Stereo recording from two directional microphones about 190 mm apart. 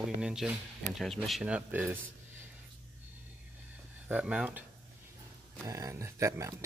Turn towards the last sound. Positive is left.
turn(degrees=-15)  # may be behind; listen again after turning